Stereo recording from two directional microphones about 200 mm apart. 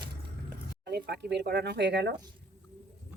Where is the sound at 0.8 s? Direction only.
55° right (ahead or behind).